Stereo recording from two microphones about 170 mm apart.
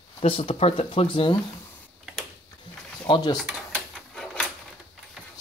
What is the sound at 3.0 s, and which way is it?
Speech, 25° left (ahead or behind).